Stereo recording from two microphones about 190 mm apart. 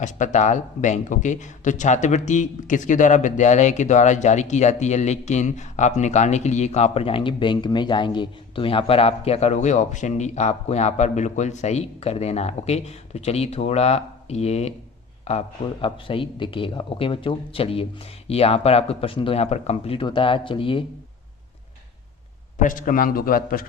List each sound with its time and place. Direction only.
0.0 s a man's voice: 40° left (ahead or behind)
22.6 s a man's voice: 45° left (ahead or behind)